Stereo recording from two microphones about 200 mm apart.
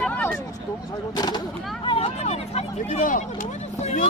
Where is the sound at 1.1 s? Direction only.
20° left (ahead or behind).